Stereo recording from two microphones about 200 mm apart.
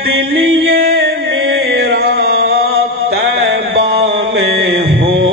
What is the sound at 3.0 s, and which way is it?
Mantra, 60° right (ahead or behind).